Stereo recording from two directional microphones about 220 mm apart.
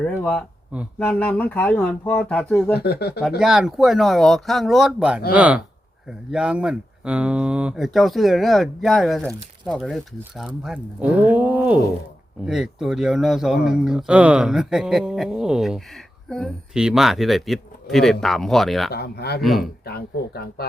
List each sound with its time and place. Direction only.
0.0 s speech: 5° left (ahead or behind)
2.7 s speech: 45° left (ahead or behind)
3.4 s speech: centre (ahead or behind)
18.9 s speech: 45° left (ahead or behind)
19.4 s speech: centre (ahead or behind)
19.8 s speech: 45° left (ahead or behind)